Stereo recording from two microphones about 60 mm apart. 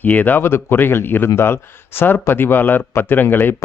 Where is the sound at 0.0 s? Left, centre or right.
Left.